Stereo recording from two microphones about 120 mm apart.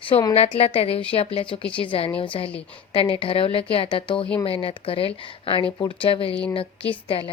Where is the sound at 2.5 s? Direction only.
10° left (ahead or behind).